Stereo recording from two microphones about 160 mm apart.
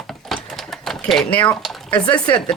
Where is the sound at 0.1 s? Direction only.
Centre (ahead or behind).